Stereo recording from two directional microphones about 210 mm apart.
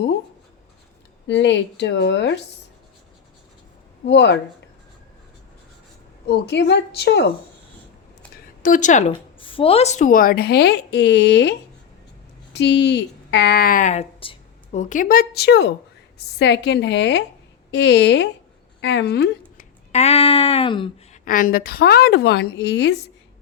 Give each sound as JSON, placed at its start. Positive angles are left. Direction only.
{"t": 1.3, "sound": "a woman's voice", "side_deg": 55}
{"t": 4.0, "sound": "a woman's voice", "side_deg": 55}
{"t": 6.2, "sound": "a woman's voice", "side_deg": 55}
{"t": 8.6, "sound": "speech", "side_deg": 35}
{"t": 12.5, "sound": "a woman's voice", "side_deg": 55}
{"t": 19.9, "sound": "a sound", "side_deg": 30}
{"t": 21.2, "sound": "a woman's voice", "side_deg": 40}